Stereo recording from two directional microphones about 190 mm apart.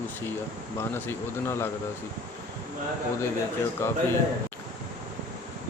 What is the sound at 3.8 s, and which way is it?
Speech, 15° left (ahead or behind).